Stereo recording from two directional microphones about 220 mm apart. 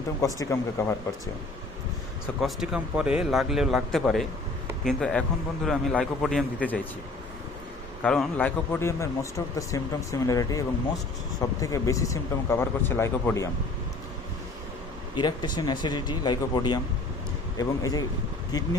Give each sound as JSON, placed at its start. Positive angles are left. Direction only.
{"t": 0.2, "sound": "speech", "side_deg": 15}
{"t": 2.2, "sound": "a man's voice", "side_deg": 0}
{"t": 8.0, "sound": "speech", "side_deg": 5}
{"t": 11.6, "sound": "speech", "side_deg": 15}
{"t": 15.1, "sound": "speech", "side_deg": 20}